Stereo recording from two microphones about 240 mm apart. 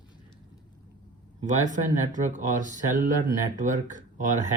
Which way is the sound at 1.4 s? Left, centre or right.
Right.